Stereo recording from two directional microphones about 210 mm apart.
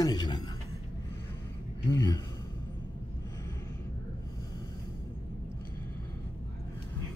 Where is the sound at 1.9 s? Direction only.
15° left (ahead or behind).